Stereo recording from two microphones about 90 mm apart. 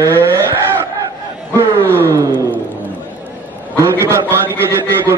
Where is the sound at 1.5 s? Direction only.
25° right (ahead or behind).